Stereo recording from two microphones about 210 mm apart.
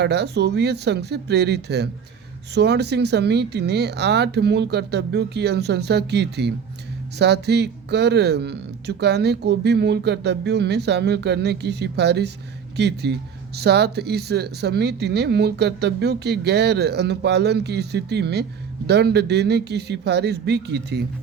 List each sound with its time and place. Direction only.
0.0 s speech: 55° right (ahead or behind)